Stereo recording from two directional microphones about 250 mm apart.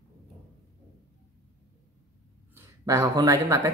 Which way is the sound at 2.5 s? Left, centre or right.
Centre.